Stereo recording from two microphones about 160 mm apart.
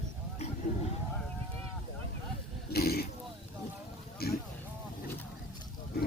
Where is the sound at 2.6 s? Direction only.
75° left (ahead or behind).